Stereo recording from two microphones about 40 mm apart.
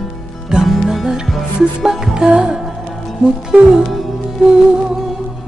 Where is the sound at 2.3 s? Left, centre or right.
Right.